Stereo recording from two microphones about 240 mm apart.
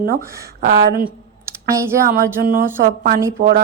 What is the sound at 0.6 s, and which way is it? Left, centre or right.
Speech, right.